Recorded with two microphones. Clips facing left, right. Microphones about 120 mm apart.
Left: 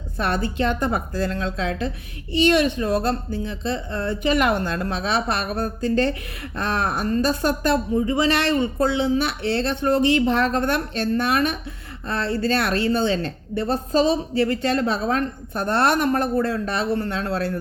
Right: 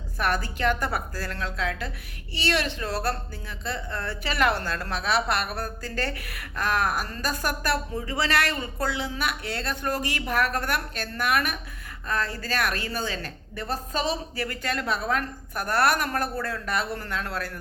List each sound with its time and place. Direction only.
0.2 s a woman's voice: 25° left (ahead or behind)